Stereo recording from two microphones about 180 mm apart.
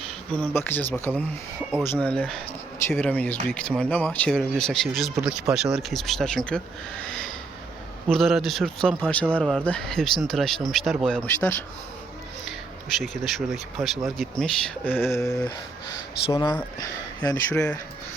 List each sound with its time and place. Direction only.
0.3 s speech: 10° left (ahead or behind)
8.1 s speech: centre (ahead or behind)
13.0 s speech: centre (ahead or behind); by 16.6 s 15° left (ahead or behind)
17.5 s speech: 5° left (ahead or behind)